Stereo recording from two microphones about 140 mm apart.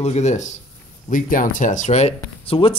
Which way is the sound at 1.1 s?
80° left.